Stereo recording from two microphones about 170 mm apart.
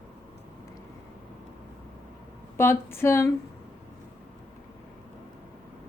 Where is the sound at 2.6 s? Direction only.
15° left (ahead or behind).